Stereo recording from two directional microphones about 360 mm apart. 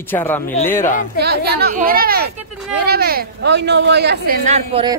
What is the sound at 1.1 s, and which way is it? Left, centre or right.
Speech, right.